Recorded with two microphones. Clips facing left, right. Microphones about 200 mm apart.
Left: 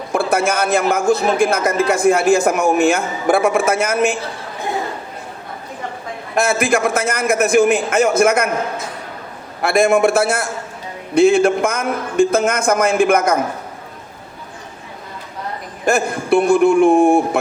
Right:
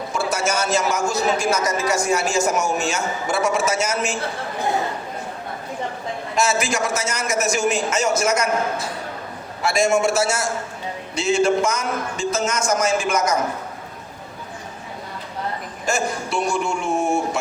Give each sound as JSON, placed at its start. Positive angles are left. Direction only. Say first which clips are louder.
{"t": 0.1, "sound": "a man's voice", "louder": "left 7 dB", "side_deg": 55}
{"t": 6.3, "sound": "a man's voice", "louder": "left 6 dB", "side_deg": 55}
{"t": 9.6, "sound": "a man's voice", "louder": "left 5 dB", "side_deg": 55}
{"t": 15.9, "sound": "a man's voice", "louder": "left 8 dB", "side_deg": 55}